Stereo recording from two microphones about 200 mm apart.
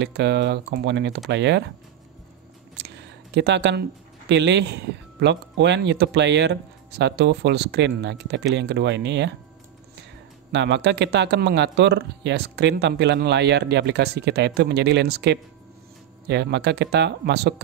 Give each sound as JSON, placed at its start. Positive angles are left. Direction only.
{"t": 0.0, "sound": "speech", "side_deg": -60}
{"t": 2.8, "sound": "a sound", "side_deg": -60}
{"t": 4.3, "sound": "speech", "side_deg": -60}
{"t": 10.5, "sound": "speech", "side_deg": -60}